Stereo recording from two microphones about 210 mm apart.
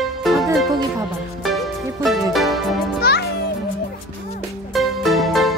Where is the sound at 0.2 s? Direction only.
Centre (ahead or behind).